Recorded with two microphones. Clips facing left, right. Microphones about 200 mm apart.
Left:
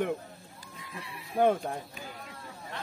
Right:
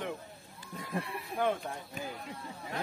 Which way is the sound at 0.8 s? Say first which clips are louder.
Right 8 dB; 55° right (ahead or behind).